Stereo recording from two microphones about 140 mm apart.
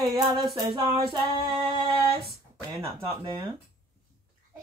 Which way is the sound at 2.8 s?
25° right (ahead or behind).